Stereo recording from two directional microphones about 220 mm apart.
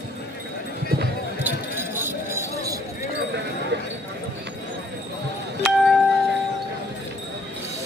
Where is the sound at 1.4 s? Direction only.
10° right (ahead or behind).